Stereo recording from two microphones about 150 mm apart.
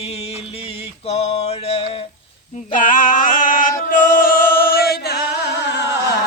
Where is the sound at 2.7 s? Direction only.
60° left (ahead or behind).